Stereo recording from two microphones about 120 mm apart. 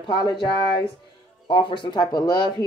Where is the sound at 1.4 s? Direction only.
40° left (ahead or behind).